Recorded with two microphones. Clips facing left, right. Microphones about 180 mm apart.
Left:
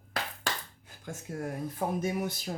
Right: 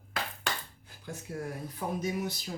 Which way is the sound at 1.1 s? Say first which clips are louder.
Left 1 dB; 45° left (ahead or behind).